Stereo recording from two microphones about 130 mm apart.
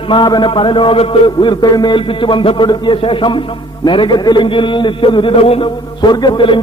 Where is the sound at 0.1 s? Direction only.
35° left (ahead or behind).